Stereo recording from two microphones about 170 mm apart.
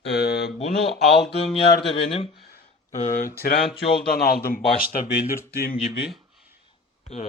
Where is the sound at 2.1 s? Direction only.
35° left (ahead or behind).